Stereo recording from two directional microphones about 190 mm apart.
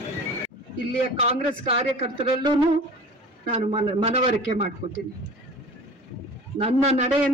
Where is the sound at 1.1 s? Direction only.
30° right (ahead or behind).